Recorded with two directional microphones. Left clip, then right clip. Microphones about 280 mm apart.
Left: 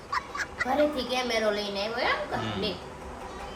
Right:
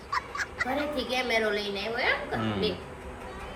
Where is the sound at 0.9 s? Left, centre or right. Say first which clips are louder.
Right 1 dB; left.